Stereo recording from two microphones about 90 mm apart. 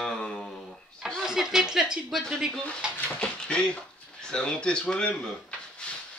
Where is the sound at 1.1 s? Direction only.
5° right (ahead or behind).